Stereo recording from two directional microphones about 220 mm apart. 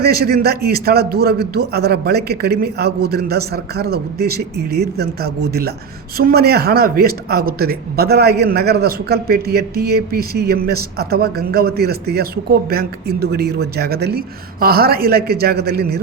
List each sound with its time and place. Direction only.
0.0 s speech: 45° right (ahead or behind)